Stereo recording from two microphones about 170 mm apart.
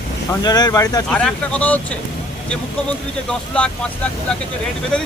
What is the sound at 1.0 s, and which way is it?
Speech, 5° left (ahead or behind).